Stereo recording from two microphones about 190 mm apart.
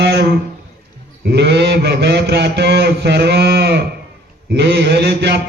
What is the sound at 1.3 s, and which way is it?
Mantra, 65° right (ahead or behind).